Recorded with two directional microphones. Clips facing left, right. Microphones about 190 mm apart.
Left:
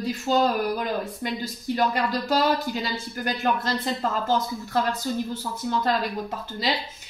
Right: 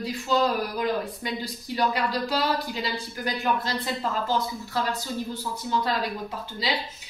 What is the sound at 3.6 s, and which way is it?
Speech, 45° left (ahead or behind).